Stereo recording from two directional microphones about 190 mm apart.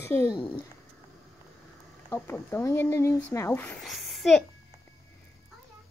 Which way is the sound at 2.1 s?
15° left (ahead or behind).